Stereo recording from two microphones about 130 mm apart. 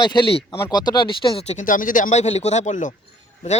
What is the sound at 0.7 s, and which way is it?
Speech, 35° left (ahead or behind).